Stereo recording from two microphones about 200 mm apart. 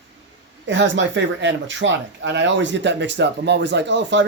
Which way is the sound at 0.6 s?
65° right (ahead or behind).